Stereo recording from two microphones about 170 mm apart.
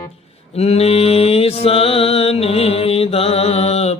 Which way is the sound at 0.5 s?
35° left (ahead or behind).